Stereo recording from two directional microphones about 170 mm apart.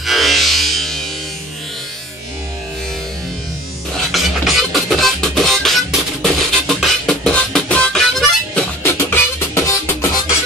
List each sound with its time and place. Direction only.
0.0 s music: centre (ahead or behind)
4.1 s music: centre (ahead or behind)
8.8 s music: 15° left (ahead or behind)